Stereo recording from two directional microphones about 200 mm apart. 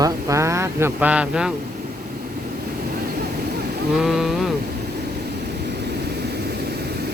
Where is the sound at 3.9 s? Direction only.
Centre (ahead or behind).